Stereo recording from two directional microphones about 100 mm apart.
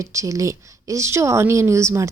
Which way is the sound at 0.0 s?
30° right (ahead or behind).